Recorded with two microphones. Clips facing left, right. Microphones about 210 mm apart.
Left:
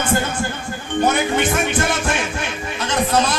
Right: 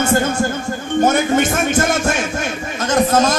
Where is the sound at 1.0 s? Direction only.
45° right (ahead or behind).